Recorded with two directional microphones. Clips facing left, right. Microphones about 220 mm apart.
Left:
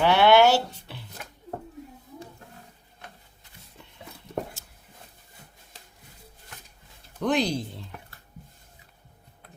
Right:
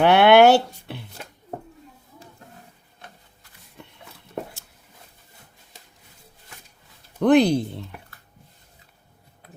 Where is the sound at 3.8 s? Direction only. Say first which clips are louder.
Right 7 dB; 60° right (ahead or behind).